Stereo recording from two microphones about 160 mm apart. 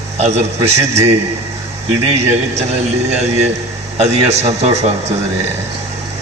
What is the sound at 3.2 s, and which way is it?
A man's voice, 45° right (ahead or behind).